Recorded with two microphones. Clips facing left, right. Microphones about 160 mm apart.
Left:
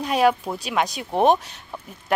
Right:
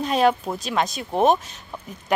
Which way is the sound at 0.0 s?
10° left (ahead or behind).